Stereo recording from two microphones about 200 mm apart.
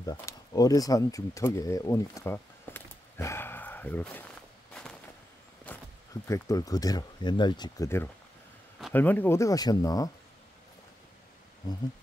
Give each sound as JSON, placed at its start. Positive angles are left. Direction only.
{"t": 0.0, "sound": "speech", "side_deg": 15}
{"t": 6.2, "sound": "speech", "side_deg": 15}